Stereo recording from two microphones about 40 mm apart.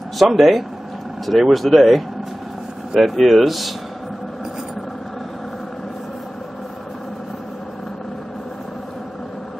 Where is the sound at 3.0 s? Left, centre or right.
Centre.